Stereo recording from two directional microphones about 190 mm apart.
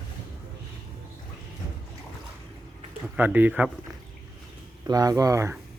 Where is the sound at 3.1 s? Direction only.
10° right (ahead or behind).